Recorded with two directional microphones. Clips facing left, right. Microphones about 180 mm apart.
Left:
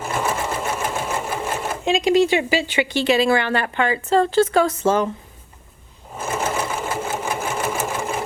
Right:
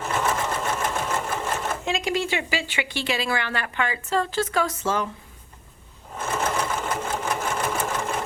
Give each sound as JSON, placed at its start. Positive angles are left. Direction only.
{"t": 0.0, "sound": "sewing machine", "side_deg": 10}
{"t": 2.6, "sound": "a woman's voice", "side_deg": 20}
{"t": 6.1, "sound": "sewing machine", "side_deg": 10}